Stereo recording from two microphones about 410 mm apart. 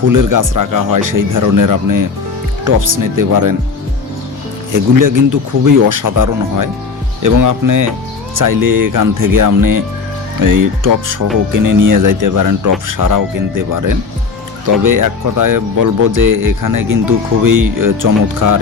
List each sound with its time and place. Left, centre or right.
0.1 s speech: right
4.7 s speech: right